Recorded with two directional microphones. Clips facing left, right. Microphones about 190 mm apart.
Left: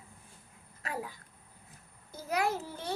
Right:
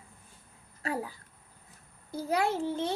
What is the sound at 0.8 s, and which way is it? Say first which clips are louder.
Speech: right 5 dB; 35° right (ahead or behind).